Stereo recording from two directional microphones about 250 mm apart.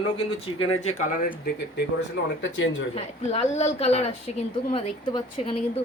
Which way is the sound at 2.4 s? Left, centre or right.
Left.